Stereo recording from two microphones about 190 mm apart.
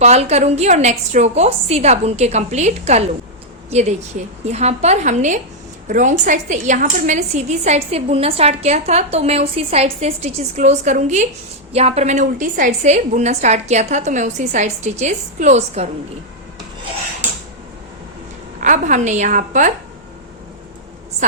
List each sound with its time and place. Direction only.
0.0 s a woman's voice: 35° right (ahead or behind)
18.6 s a woman's voice: 40° right (ahead or behind)